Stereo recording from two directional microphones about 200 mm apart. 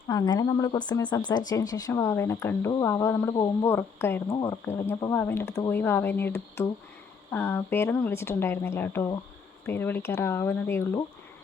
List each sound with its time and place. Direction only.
0.1 s speech: 20° left (ahead or behind)